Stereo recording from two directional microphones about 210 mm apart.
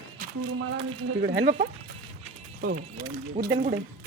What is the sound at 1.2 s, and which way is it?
Speech, 40° right (ahead or behind).